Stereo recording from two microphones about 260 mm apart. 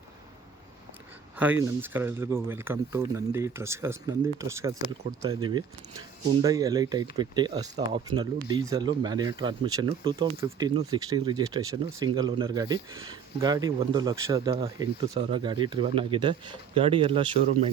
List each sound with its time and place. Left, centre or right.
1.8 s speech: centre